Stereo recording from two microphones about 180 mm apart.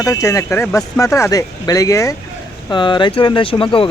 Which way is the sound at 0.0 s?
15° left (ahead or behind).